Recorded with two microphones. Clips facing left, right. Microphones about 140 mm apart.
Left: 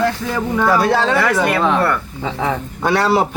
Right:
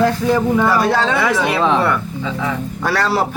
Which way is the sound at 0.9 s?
10° left (ahead or behind).